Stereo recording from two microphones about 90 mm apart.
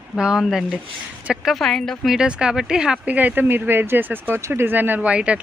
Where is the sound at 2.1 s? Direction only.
10° right (ahead or behind).